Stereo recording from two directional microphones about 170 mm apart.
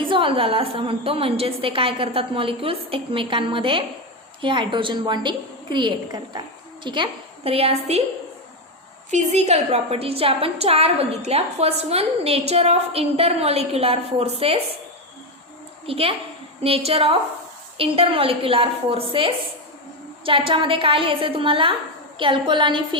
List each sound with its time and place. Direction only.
0.0 s a woman's voice: 30° right (ahead or behind)
9.0 s a woman's voice: 40° right (ahead or behind)
15.9 s a woman's voice: 35° right (ahead or behind)